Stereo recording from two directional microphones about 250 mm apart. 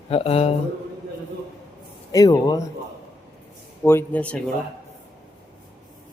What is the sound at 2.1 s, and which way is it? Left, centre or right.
Speech, centre.